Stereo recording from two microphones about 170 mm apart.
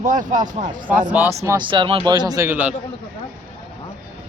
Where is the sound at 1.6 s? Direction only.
30° right (ahead or behind); by 2.7 s 10° right (ahead or behind).